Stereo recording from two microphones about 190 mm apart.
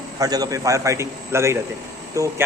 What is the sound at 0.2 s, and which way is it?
A man's voice, 20° right (ahead or behind).